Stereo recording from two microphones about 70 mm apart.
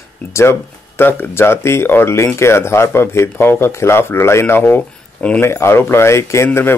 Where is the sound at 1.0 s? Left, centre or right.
Left.